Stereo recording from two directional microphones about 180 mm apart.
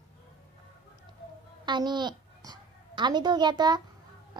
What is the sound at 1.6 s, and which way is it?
A child's voice, 25° right (ahead or behind).